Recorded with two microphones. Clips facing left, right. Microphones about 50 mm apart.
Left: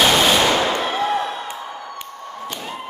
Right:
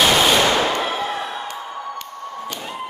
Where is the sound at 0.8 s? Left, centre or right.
Centre.